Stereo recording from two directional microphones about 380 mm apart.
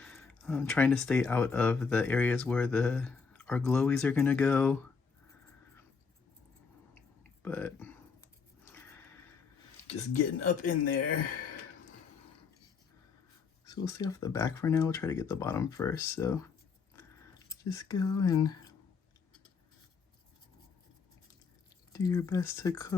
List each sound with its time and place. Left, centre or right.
0.0 s speech: centre
7.4 s speech: centre
8.6 s a sound: centre
9.8 s speech: centre
13.7 s speech: centre
17.5 s speech: centre
21.9 s speech: centre